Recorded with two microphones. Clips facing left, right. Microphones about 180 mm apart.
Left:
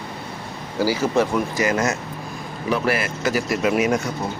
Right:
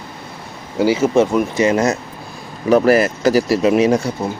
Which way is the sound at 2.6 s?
40° right (ahead or behind).